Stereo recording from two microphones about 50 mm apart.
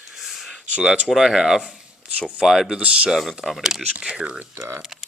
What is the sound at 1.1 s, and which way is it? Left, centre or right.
Speech, centre.